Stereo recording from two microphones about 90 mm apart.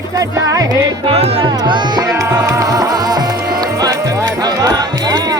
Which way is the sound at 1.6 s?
55° right (ahead or behind).